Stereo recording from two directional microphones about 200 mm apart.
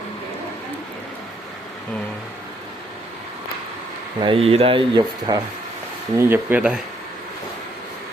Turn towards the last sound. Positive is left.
turn(degrees=-5)  # may be behind; listen again after turning